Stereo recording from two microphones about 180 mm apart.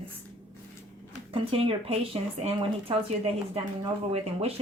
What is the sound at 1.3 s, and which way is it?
Speech, 30° right (ahead or behind).